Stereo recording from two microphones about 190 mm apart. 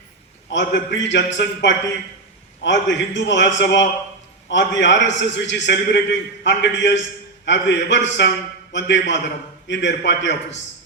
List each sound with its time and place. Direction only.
0.5 s a man's voice: 65° left (ahead or behind)